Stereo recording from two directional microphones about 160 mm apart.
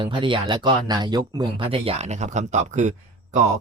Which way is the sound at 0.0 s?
30° right (ahead or behind).